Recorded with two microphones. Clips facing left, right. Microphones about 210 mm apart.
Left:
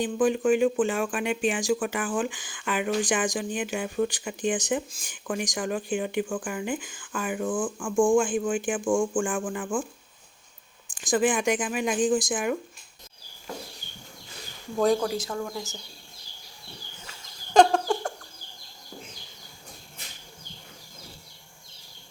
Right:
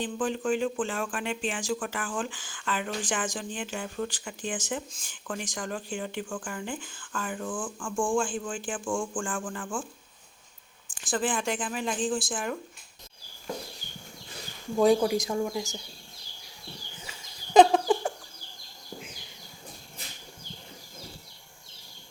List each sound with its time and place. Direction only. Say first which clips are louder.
0.0 s speech: left 6 dB; 15° left (ahead or behind)
11.0 s speech: left 6 dB; 15° left (ahead or behind)
14.8 s speech: right 2 dB; 10° right (ahead or behind)
17.0 s fowl: right 1 dB; 10° right (ahead or behind)